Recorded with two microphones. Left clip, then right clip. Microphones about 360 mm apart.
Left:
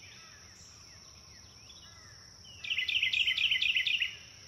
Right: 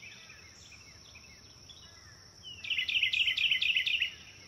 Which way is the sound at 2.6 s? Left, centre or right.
Centre.